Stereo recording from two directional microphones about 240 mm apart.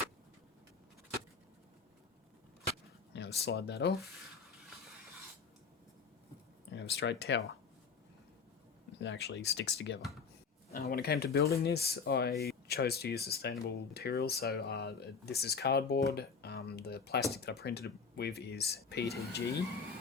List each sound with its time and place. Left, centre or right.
3.1 s speech: left
6.7 s speech: left
9.0 s speech: left